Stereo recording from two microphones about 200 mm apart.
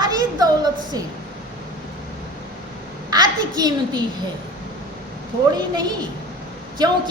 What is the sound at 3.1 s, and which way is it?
Speech, 20° right (ahead or behind).